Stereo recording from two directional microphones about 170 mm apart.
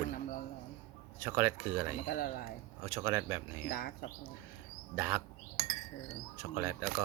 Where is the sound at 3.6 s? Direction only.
60° left (ahead or behind).